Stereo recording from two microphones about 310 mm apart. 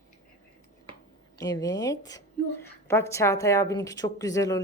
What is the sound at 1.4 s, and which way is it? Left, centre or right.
A woman's voice, centre.